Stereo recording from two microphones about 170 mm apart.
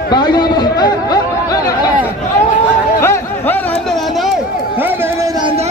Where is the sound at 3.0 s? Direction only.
15° left (ahead or behind).